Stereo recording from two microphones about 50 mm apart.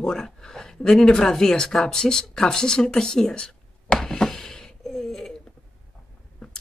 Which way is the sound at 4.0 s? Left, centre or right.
Centre.